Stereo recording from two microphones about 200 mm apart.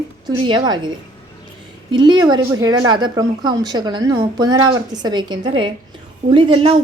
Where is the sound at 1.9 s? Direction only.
20° right (ahead or behind).